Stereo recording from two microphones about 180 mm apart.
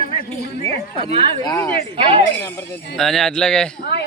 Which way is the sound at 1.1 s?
30° right (ahead or behind).